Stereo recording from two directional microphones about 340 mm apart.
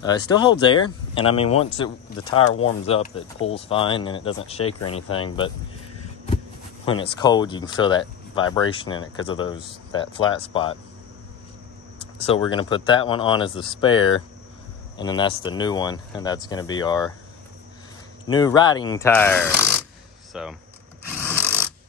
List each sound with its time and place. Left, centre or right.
0.0 s speech: centre
6.9 s speech: centre
12.0 s speech: centre
18.3 s speech: centre